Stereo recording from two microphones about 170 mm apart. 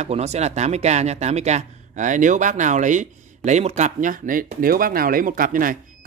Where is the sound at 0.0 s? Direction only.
40° right (ahead or behind).